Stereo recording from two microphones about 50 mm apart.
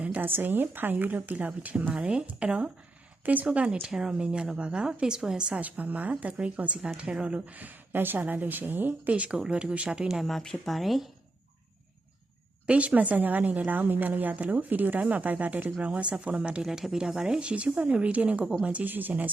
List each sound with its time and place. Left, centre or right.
0.2 s speech: right
3.8 s a woman's voice: centre
5.6 s speech: right
9.0 s speech: right
10.2 s speech: centre
12.6 s speech: right
16.6 s a woman's voice: centre
17.5 s speech: right